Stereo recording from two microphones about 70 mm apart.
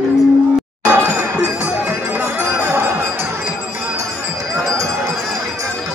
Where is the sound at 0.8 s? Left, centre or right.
Right.